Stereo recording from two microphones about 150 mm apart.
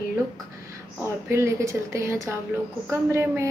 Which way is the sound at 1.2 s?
15° right (ahead or behind).